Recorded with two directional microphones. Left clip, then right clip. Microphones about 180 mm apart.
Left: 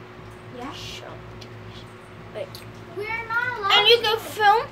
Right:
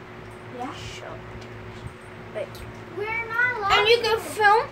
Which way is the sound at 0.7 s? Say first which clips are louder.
Left 1 dB; 10° left (ahead or behind).